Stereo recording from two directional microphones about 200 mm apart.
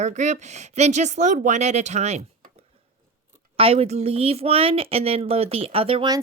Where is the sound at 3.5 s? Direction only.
30° right (ahead or behind).